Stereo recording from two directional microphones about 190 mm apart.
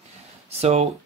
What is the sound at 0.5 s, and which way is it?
Speech, 35° right (ahead or behind).